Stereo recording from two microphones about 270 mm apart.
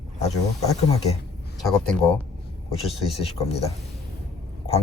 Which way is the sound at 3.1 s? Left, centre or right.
Left.